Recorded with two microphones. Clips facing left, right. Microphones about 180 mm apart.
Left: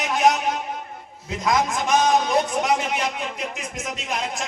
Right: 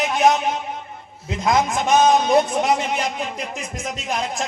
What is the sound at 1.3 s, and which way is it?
A man's voice, 25° right (ahead or behind).